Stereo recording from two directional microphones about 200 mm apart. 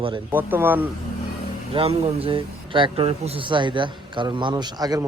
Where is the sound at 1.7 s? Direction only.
30° right (ahead or behind).